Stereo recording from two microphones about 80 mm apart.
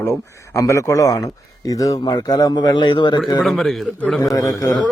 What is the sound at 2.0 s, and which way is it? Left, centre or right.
Speech, left.